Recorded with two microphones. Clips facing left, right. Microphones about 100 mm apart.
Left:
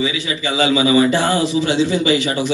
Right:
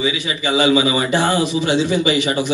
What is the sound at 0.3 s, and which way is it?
A man's voice, 20° right (ahead or behind).